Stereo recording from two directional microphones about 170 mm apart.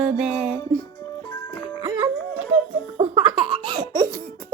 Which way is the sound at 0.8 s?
20° left (ahead or behind).